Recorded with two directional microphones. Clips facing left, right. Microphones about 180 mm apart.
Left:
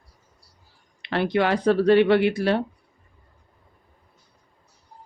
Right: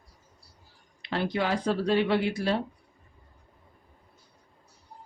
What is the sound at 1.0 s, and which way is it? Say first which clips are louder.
Speech: left 6 dB; 70° left (ahead or behind).